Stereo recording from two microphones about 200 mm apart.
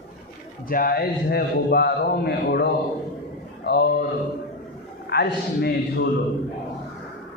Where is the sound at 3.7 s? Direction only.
55° left (ahead or behind).